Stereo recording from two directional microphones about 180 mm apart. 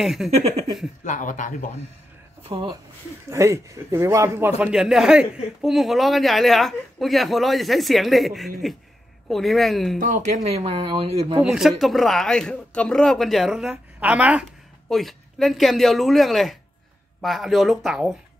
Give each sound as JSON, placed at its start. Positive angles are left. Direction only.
{"t": 0.0, "sound": "a man's voice", "side_deg": 0}
{"t": 1.0, "sound": "speech", "side_deg": 45}
{"t": 2.4, "sound": "speech", "side_deg": -30}
{"t": 3.3, "sound": "a man's voice", "side_deg": -15}
{"t": 9.9, "sound": "speech", "side_deg": -45}
{"t": 11.5, "sound": "a man's voice", "side_deg": 0}